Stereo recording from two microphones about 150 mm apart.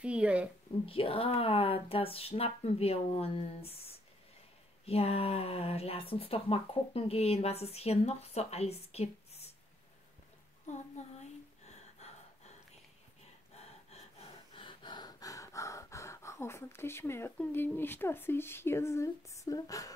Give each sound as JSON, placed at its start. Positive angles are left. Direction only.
{"t": 0.0, "sound": "speech", "side_deg": -10}
{"t": 0.8, "sound": "speech", "side_deg": 40}
{"t": 10.7, "sound": "a sound", "side_deg": 50}
{"t": 11.6, "sound": "gasp", "side_deg": 45}
{"t": 13.6, "sound": "snort", "side_deg": 45}
{"t": 14.6, "sound": "gasp", "side_deg": 35}